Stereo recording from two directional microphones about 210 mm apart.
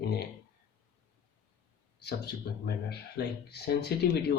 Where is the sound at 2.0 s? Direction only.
50° left (ahead or behind).